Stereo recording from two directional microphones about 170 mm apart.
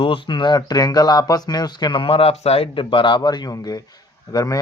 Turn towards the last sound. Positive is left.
turn(degrees=20)  # may be behind; listen again after turning